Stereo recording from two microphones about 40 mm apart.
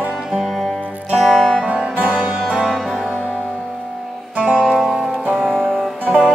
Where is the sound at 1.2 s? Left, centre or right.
Centre.